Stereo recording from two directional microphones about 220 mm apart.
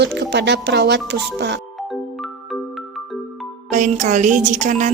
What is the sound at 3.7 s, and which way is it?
A woman's voice, 35° right (ahead or behind).